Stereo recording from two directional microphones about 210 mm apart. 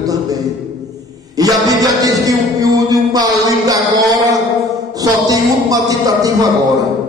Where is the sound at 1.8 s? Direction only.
15° right (ahead or behind).